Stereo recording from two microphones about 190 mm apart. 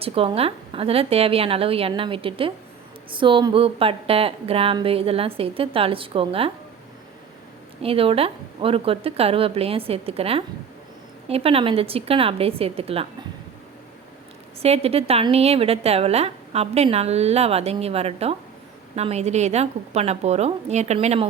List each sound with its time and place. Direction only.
0.0 s a woman's voice: 30° right (ahead or behind)
7.8 s a woman's voice: 30° right (ahead or behind)
14.6 s a woman's voice: 30° right (ahead or behind)